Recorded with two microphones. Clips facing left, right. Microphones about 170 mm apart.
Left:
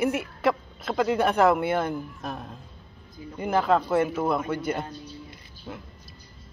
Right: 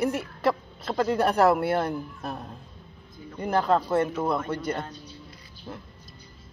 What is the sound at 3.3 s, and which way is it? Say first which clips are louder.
Speech: left 1 dB; 5° left (ahead or behind).